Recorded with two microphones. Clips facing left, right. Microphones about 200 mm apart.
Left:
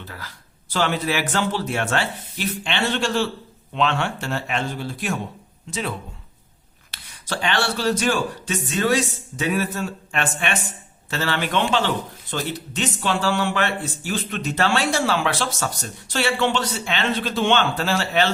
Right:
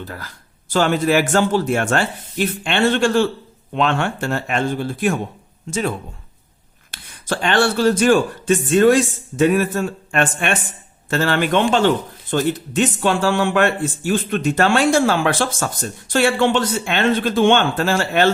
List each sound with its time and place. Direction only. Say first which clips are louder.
0.0 s speech: right 6 dB; 45° right (ahead or behind)
6.9 s speech: right 5 dB; 50° right (ahead or behind)